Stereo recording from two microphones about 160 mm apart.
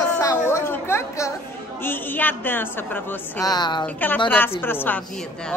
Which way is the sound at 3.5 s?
25° left (ahead or behind).